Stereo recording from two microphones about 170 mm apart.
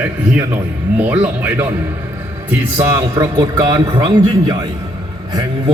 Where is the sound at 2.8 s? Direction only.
20° right (ahead or behind).